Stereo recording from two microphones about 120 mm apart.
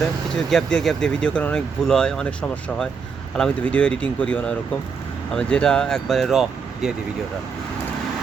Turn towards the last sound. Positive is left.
turn(degrees=0)  # may be behind; listen again after turning